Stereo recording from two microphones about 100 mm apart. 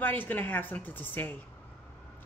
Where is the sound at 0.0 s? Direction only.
20° left (ahead or behind).